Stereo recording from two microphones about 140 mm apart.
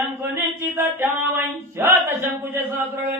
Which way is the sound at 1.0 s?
15° right (ahead or behind).